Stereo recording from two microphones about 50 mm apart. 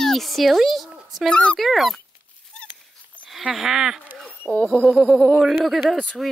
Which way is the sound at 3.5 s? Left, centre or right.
Centre.